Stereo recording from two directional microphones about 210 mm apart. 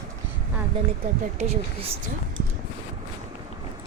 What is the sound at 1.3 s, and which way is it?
Speech, 30° right (ahead or behind).